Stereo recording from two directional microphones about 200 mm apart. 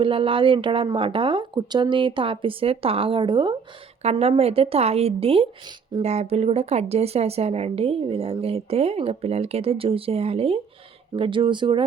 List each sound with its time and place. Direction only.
0.0 s speech: 25° right (ahead or behind)